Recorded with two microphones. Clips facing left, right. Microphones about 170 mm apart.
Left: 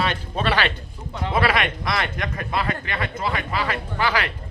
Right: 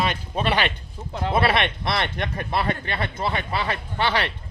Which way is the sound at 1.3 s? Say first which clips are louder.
Even; 30° right (ahead or behind).